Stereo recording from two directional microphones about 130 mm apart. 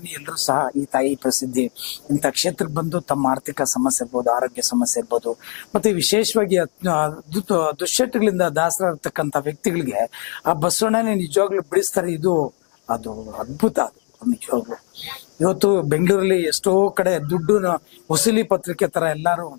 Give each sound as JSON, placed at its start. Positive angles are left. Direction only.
{"t": 0.1, "sound": "speech", "side_deg": 15}